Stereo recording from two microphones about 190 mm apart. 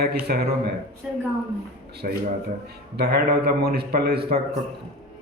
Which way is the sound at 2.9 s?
55° right (ahead or behind).